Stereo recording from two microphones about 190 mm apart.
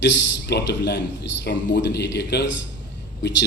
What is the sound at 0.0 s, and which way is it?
A man's voice, 65° left (ahead or behind).